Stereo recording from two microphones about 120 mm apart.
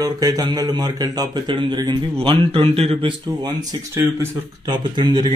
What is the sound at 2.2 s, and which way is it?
Speech, 45° right (ahead or behind).